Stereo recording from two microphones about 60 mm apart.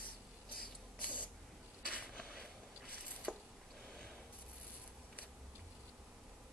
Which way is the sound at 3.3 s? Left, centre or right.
Left.